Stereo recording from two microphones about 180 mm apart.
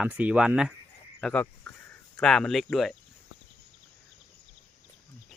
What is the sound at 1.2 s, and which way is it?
Speech, 10° left (ahead or behind).